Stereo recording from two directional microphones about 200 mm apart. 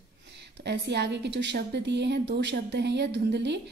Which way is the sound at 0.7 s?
60° right (ahead or behind).